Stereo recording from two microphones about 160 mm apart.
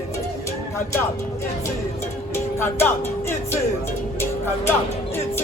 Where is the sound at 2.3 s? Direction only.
15° left (ahead or behind).